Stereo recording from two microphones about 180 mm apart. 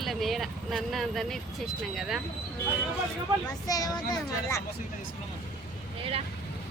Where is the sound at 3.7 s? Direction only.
20° left (ahead or behind).